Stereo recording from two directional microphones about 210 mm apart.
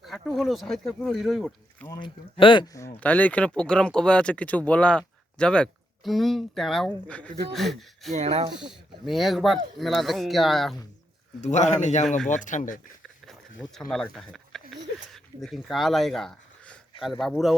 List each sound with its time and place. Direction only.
0.0 s speech: centre (ahead or behind)
1.9 s speech: 25° left (ahead or behind); by 8.1 s centre (ahead or behind)
8.1 s speech: 30° right (ahead or behind)
8.5 s speech: centre (ahead or behind)
11.3 s a man's voice: 35° left (ahead or behind)
13.2 s speech: centre (ahead or behind)